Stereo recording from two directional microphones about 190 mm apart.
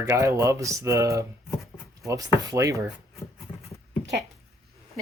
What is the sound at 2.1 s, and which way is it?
Speech, 15° right (ahead or behind).